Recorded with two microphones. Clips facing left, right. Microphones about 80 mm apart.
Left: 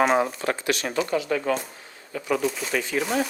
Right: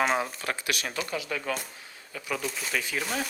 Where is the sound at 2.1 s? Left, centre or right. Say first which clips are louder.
Left 8 dB; centre.